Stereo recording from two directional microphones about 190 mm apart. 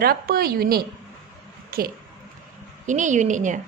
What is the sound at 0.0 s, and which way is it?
A woman's voice, 55° right (ahead or behind).